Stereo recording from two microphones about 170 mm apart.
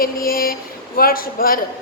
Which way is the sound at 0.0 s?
60° left (ahead or behind).